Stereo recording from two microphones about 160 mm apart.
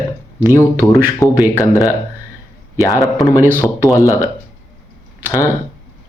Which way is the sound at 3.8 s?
20° left (ahead or behind).